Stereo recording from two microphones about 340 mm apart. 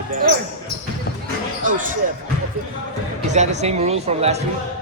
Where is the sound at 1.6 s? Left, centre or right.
Right.